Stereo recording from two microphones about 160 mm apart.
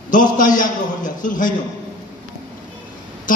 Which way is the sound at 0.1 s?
55° left (ahead or behind).